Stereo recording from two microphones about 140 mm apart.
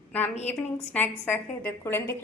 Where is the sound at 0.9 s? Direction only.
10° left (ahead or behind).